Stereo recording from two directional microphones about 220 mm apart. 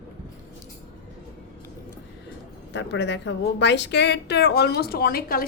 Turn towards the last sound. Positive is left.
turn(degrees=40)  # may be behind; listen again after turning